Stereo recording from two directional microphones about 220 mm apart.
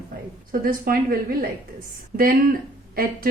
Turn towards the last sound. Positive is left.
turn(degrees=-40)  # may be behind; listen again after turning